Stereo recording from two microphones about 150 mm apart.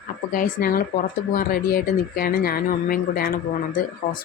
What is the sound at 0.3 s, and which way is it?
Speech, 65° left (ahead or behind).